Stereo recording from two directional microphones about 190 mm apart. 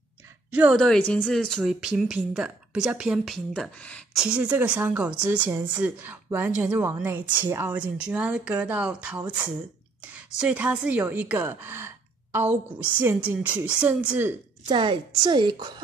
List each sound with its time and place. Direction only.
0.5 s a woman's voice: 5° right (ahead or behind)
0.7 s speech: 5° left (ahead or behind)
14.7 s a woman's voice: 25° right (ahead or behind)